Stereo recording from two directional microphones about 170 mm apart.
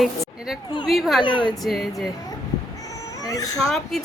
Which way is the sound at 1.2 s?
30° left (ahead or behind).